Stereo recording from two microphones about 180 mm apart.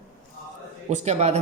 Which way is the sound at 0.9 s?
40° right (ahead or behind).